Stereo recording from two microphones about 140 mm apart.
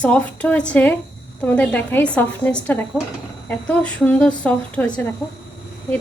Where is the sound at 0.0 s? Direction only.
10° left (ahead or behind).